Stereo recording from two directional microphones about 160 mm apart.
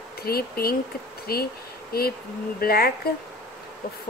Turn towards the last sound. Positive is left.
turn(degrees=70)  # may be behind; listen again after turning